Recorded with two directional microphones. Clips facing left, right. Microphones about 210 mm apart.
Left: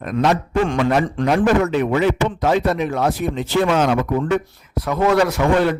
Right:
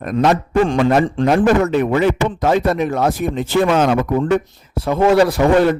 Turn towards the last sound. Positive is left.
turn(degrees=-35)  # may be behind; listen again after turning